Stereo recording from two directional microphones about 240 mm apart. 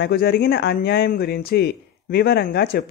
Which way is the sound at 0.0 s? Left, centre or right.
Left.